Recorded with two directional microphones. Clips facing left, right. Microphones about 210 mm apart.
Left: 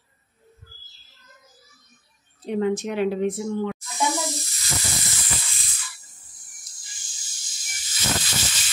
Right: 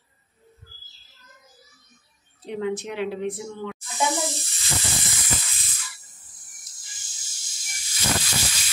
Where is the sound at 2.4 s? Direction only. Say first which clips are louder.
Left 4 dB; 45° left (ahead or behind).